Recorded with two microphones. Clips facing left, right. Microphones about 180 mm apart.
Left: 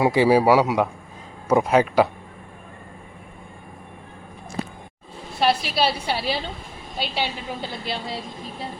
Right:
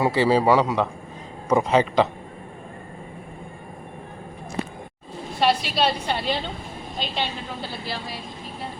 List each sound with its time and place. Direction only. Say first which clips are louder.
0.0 s a man's voice: left 2 dB; 15° left (ahead or behind)
5.4 s a woman's voice: even; centre (ahead or behind)
7.9 s speech: left 5 dB; 25° left (ahead or behind)